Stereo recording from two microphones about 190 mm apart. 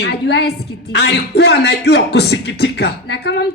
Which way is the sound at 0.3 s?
60° left (ahead or behind).